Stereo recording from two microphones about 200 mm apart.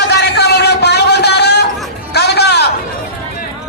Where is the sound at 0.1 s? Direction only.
55° left (ahead or behind).